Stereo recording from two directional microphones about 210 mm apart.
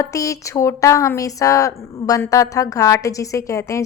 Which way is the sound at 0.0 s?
15° left (ahead or behind).